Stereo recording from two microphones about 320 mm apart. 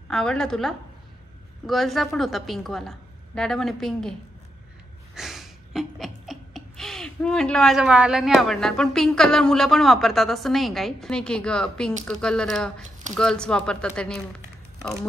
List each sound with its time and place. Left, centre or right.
0.1 s a woman's voice: centre
5.1 s a woman's voice: centre